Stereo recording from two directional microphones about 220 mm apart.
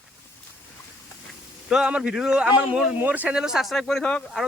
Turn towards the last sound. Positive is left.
turn(degrees=0)  # may be behind; listen again after turning